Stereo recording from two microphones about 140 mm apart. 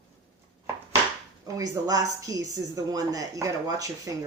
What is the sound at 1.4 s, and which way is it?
A woman's voice, 25° right (ahead or behind).